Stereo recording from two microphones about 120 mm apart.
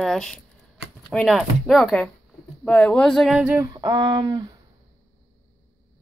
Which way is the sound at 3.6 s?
35° right (ahead or behind).